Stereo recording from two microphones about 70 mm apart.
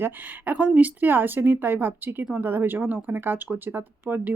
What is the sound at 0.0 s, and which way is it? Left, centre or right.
Speech, right.